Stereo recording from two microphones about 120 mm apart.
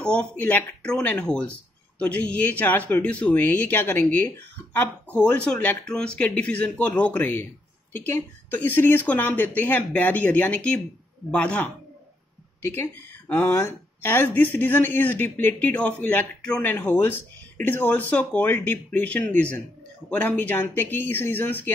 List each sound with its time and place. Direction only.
0.0 s speech: 10° left (ahead or behind)